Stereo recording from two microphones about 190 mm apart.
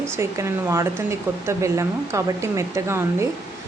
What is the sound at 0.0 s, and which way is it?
Speech, 15° right (ahead or behind).